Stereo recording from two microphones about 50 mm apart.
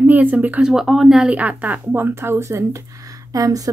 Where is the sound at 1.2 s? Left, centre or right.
Right.